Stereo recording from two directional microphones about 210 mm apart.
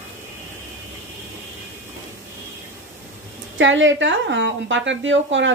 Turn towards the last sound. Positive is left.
turn(degrees=-60)  # may be behind; listen again after turning